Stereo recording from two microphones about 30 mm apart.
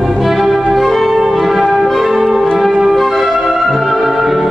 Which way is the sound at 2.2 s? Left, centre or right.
Centre.